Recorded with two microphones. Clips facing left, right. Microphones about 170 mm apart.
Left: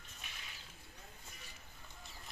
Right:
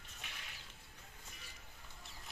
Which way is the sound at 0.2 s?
70° right (ahead or behind).